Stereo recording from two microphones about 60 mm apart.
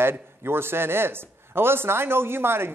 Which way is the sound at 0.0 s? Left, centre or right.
Right.